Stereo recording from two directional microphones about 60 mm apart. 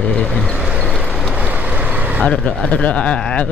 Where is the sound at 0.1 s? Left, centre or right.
Centre.